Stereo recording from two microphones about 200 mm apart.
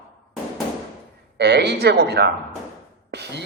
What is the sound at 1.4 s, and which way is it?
A man's voice, 55° right (ahead or behind).